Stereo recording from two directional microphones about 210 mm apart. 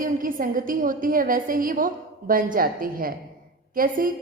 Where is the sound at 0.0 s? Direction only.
40° right (ahead or behind).